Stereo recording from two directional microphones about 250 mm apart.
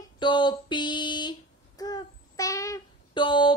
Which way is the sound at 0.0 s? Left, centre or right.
Centre.